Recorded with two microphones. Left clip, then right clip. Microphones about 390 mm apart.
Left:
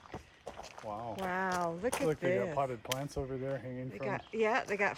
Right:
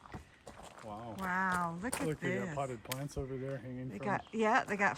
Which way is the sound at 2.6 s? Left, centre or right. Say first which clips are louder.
Left 5 dB; left.